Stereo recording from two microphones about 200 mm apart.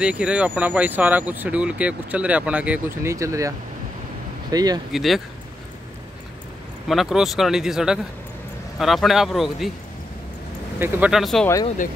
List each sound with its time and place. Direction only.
0.0 s speech: 5° right (ahead or behind)
4.9 s speech: centre (ahead or behind)
6.9 s speech: centre (ahead or behind)
10.8 s speech: 5° right (ahead or behind)